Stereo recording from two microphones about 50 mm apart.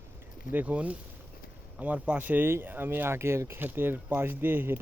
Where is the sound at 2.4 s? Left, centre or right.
Right.